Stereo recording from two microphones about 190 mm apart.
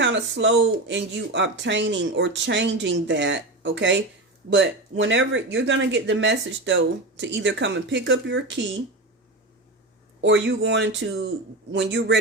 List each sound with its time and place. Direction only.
0.0 s speech: 75° right (ahead or behind)
10.2 s speech: 70° right (ahead or behind)